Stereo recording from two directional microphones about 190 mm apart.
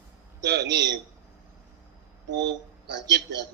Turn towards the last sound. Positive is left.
turn(degrees=-65)  # may be behind; listen again after turning